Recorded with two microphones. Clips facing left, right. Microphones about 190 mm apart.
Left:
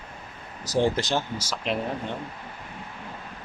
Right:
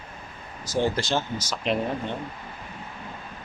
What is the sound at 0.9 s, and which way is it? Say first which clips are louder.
Speech: even; 15° left (ahead or behind).